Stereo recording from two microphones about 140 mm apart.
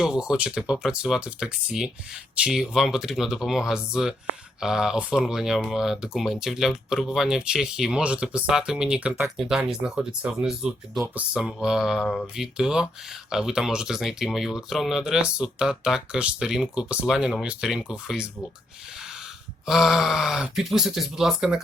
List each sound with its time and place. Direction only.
0.0 s speech: 5° right (ahead or behind)
19.6 s speech: 5° right (ahead or behind)